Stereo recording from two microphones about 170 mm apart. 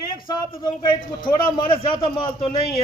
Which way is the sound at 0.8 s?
30° left (ahead or behind).